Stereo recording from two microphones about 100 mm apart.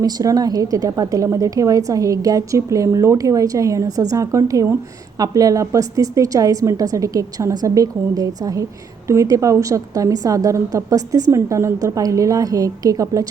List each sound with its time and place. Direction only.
0.0 s a woman's voice: 40° right (ahead or behind)